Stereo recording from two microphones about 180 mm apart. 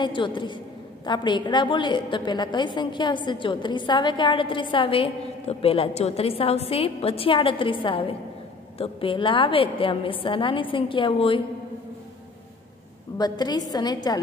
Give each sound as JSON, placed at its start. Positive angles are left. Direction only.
{"t": 0.0, "sound": "a woman's voice", "side_deg": 25}
{"t": 13.2, "sound": "a woman's voice", "side_deg": 20}